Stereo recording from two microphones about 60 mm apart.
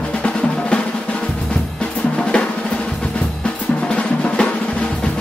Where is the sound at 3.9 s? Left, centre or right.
Centre.